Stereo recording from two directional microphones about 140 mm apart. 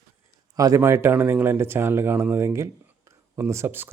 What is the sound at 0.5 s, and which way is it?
Speech, 25° right (ahead or behind).